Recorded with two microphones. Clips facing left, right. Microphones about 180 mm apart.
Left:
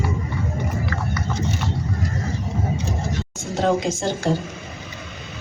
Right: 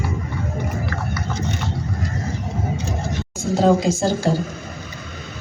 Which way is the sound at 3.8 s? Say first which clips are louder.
Right 4 dB; 10° right (ahead or behind).